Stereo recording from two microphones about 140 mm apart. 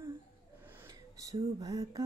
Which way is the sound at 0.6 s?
20° right (ahead or behind).